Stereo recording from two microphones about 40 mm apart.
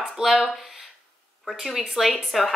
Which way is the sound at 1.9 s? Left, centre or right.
Centre.